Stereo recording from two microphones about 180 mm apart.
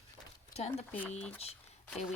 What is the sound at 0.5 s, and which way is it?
Speech, 35° left (ahead or behind).